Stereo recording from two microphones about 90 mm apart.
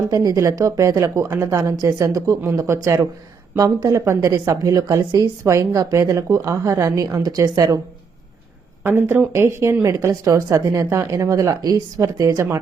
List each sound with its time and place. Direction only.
0.1 s speech: 40° right (ahead or behind)
8.8 s speech: 25° right (ahead or behind)